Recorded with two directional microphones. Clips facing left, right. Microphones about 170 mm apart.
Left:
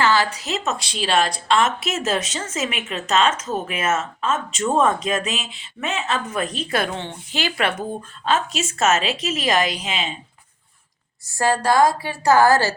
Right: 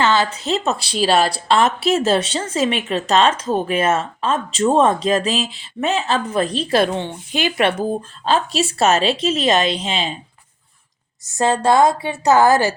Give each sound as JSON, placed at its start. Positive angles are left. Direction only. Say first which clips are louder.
{"t": 0.0, "sound": "a woman's voice", "louder": "right 2 dB", "side_deg": -20}
{"t": 6.9, "sound": "a woman's voice", "louder": "right 5 dB", "side_deg": -15}
{"t": 7.8, "sound": "a woman's voice", "louder": "right 6 dB", "side_deg": -30}
{"t": 11.3, "sound": "a woman's voice", "louder": "right 3 dB", "side_deg": -20}